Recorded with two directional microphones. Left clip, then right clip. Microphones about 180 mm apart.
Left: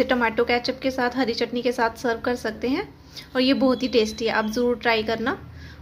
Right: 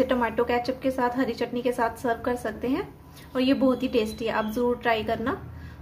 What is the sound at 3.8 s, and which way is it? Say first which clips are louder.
A woman's voice: left 4 dB; 20° left (ahead or behind).